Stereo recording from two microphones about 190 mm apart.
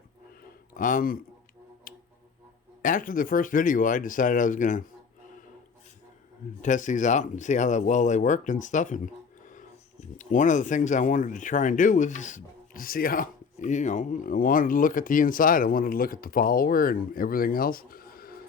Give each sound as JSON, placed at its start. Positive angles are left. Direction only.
{"t": 0.4, "sound": "a sound", "side_deg": 45}
{"t": 1.9, "sound": "tick-tock", "side_deg": 45}
{"t": 2.8, "sound": "speech", "side_deg": 45}
{"t": 6.6, "sound": "speech", "side_deg": 40}